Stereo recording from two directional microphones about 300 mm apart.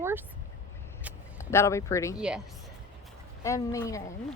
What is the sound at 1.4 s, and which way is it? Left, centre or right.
Speech, centre.